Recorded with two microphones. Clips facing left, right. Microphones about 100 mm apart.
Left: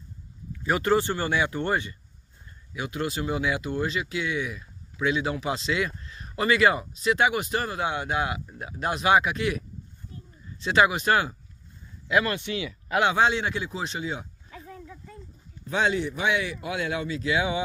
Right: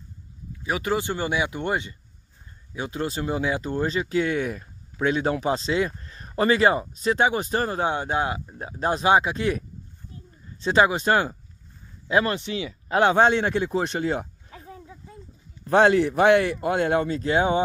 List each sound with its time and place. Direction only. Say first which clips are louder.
0.7 s speech: left 2 dB; 5° right (ahead or behind)
2.7 s speech: right 2 dB; 30° right (ahead or behind)
10.1 s a sound: left 1 dB; 35° right (ahead or behind)
12.1 s speech: right 2 dB; 30° right (ahead or behind); by 14.2 s 55° right (ahead or behind)
14.7 s a sound: right 1 dB; 20° right (ahead or behind)
15.6 s speech: right 8 dB; 60° right (ahead or behind); by 17.6 s 45° right (ahead or behind)